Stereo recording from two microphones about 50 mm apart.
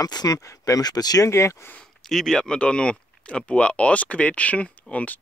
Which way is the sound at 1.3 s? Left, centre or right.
Left.